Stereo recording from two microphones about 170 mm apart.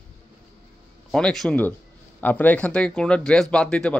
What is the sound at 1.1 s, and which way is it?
Speech, 5° left (ahead or behind).